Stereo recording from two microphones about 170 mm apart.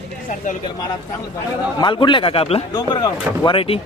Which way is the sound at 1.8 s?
30° left (ahead or behind).